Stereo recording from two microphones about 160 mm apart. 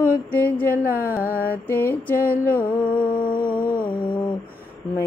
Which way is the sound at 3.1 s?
60° left (ahead or behind).